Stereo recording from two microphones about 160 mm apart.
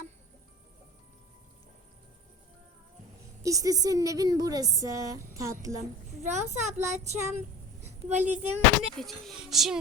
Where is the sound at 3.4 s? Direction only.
20° right (ahead or behind).